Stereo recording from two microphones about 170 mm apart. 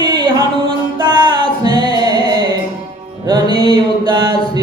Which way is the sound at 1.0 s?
25° right (ahead or behind).